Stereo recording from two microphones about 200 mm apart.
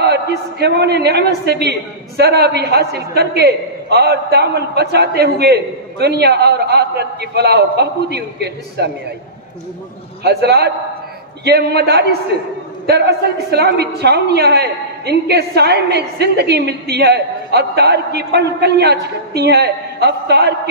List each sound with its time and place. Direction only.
0.6 s a woman's voice: 55° right (ahead or behind)
10.2 s a woman's voice: 55° right (ahead or behind)